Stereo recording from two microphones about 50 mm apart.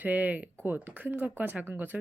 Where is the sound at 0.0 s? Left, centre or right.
Right.